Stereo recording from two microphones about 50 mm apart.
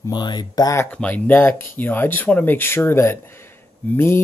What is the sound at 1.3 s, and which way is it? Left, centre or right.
Speech, left.